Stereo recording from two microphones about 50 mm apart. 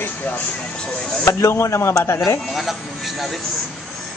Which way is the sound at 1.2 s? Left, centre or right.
Left.